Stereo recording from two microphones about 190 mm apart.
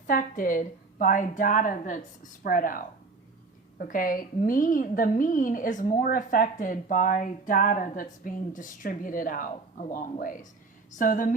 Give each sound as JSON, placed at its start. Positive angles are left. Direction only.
{"t": 0.1, "sound": "a woman's voice", "side_deg": 45}